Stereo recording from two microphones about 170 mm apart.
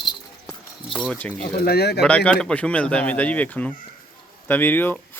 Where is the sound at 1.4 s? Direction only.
70° left (ahead or behind).